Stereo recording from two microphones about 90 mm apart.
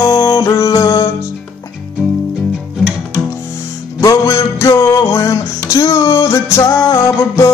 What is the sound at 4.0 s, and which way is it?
Music, 35° left (ahead or behind).